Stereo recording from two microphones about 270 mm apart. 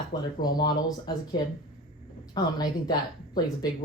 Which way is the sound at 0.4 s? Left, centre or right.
Centre.